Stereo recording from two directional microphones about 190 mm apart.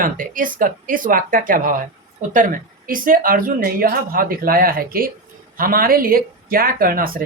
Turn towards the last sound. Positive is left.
turn(degrees=-50)  # may be behind; listen again after turning